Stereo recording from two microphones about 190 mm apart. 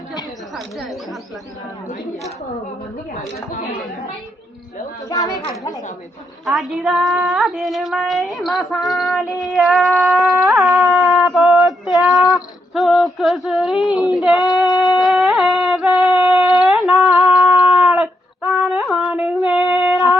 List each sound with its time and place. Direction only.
0.5 s a woman's voice: centre (ahead or behind)
5.0 s speech: 20° left (ahead or behind)
6.4 s female singing: centre (ahead or behind)
15.0 s a sound: centre (ahead or behind)
18.6 s humming: centre (ahead or behind)